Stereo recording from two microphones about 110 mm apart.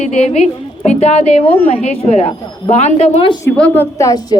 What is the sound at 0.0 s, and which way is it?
A woman's voice, 80° left.